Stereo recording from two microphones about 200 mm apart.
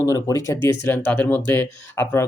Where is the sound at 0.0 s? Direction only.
15° left (ahead or behind).